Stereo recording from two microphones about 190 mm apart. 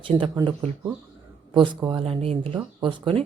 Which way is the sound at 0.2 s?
25° right (ahead or behind).